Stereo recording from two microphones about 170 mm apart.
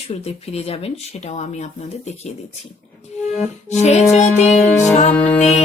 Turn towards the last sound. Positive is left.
turn(degrees=40)  # may be behind; listen again after turning